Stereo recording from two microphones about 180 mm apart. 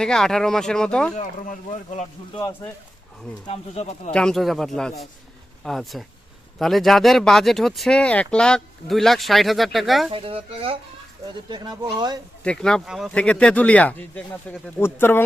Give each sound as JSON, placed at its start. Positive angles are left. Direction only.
{"t": 0.0, "sound": "speech", "side_deg": 5}
{"t": 1.1, "sound": "speech", "side_deg": 45}
{"t": 3.4, "sound": "speech", "side_deg": 35}
{"t": 4.1, "sound": "speech", "side_deg": 5}
{"t": 10.1, "sound": "speech", "side_deg": -30}
{"t": 12.4, "sound": "speech", "side_deg": 5}